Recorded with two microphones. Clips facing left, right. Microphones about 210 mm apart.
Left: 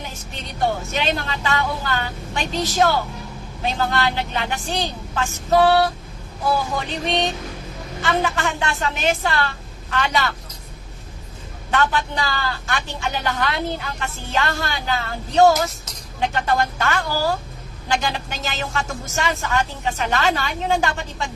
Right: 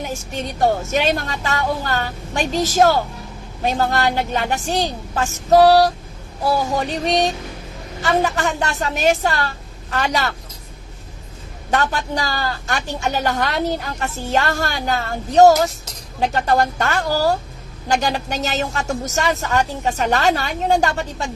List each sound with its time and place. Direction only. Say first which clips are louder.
0.0 s a woman's voice: right 8 dB; 45° right (ahead or behind)
11.7 s a woman's voice: right 1 dB; 40° right (ahead or behind)